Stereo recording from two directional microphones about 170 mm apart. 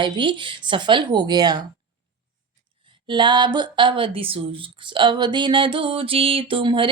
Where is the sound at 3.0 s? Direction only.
30° right (ahead or behind).